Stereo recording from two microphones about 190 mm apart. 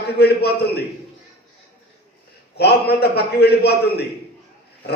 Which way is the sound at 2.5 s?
60° left (ahead or behind).